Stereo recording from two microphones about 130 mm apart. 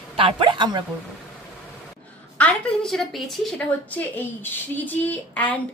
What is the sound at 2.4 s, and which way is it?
A woman's voice, 5° left (ahead or behind).